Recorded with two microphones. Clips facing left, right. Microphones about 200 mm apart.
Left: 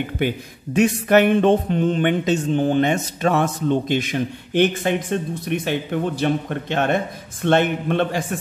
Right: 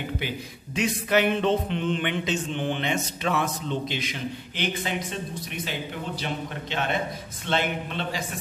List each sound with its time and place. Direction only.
0.7 s a man's voice: 50° left (ahead or behind)